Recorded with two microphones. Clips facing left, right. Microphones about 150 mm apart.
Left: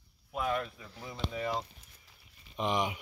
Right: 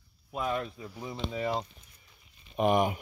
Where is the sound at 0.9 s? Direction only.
15° right (ahead or behind).